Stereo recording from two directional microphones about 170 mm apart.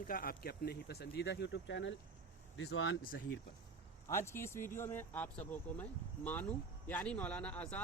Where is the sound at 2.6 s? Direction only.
65° left (ahead or behind).